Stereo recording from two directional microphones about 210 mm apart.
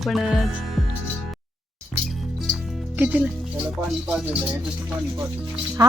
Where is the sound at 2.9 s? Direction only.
5° right (ahead or behind).